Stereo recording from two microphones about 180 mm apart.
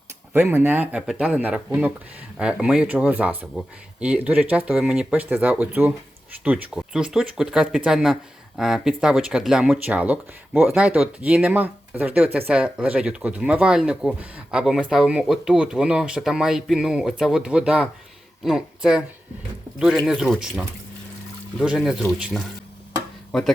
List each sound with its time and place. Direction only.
0.3 s speech: 10° right (ahead or behind)
20.1 s speech: centre (ahead or behind)